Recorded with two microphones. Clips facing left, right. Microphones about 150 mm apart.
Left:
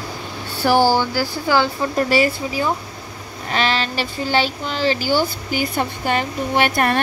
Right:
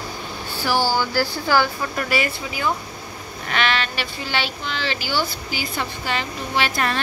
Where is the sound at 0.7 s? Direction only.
50° left (ahead or behind).